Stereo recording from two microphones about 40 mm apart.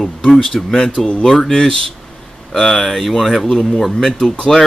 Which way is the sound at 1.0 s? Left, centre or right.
Centre.